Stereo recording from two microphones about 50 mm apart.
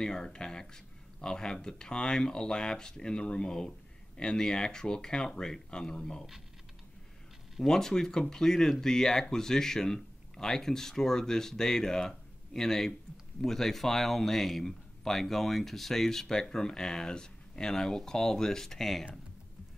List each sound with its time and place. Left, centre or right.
0.0 s a man's voice: centre
7.6 s a man's voice: centre